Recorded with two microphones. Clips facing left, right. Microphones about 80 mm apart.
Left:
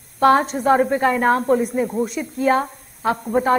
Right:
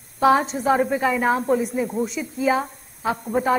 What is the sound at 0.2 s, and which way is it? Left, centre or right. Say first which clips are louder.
Speech: left 2 dB; left.